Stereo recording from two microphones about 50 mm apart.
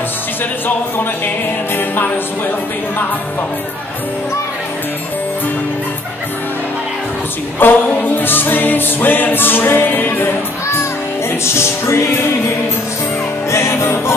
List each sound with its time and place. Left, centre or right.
7.5 s music: left
11.4 s speech: left
13.5 s speech: left